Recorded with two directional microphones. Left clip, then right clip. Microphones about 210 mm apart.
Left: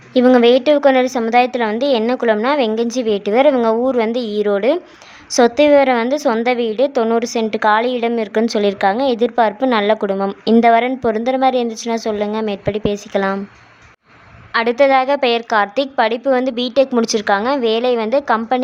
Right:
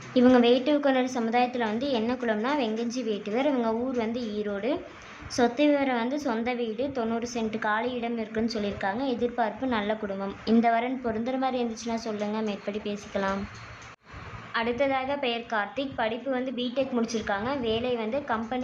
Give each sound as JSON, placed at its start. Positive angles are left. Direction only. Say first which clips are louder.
{"t": 0.1, "sound": "a woman's voice", "louder": "left 10 dB", "side_deg": 35}
{"t": 14.5, "sound": "a woman's voice", "louder": "left 14 dB", "side_deg": 45}